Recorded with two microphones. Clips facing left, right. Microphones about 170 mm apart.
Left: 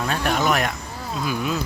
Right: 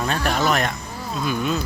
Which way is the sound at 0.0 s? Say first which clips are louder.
Even; 5° left (ahead or behind).